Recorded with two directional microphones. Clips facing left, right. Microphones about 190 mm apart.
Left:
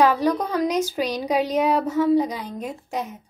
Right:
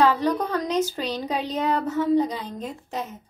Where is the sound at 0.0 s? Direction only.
10° left (ahead or behind).